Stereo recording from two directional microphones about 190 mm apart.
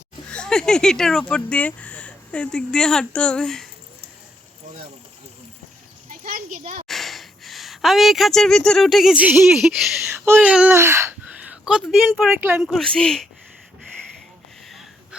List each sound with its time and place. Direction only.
0.3 s speech: 5° left (ahead or behind)
6.2 s a sound: 45° right (ahead or behind)
6.8 s speech: centre (ahead or behind)
12.3 s speech: 10° right (ahead or behind)
12.6 s speech: 5° left (ahead or behind)